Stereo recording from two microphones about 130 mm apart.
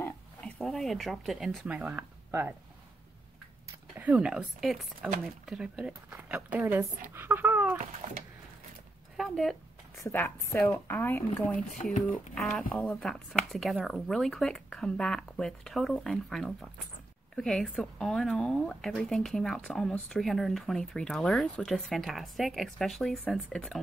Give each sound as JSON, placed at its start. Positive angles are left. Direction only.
{"t": 0.4, "sound": "speech", "side_deg": 5}
{"t": 1.7, "sound": "speech", "side_deg": -10}
{"t": 3.9, "sound": "a woman's voice", "side_deg": -10}
{"t": 8.0, "sound": "a sound", "side_deg": -90}
{"t": 9.1, "sound": "speech", "side_deg": 0}
{"t": 10.0, "sound": "a woman's voice", "side_deg": 15}